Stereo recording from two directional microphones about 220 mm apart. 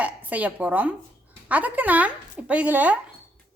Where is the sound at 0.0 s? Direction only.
5° right (ahead or behind).